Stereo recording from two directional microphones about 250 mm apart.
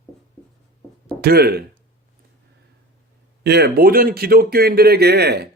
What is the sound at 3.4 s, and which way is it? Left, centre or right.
Speech, right.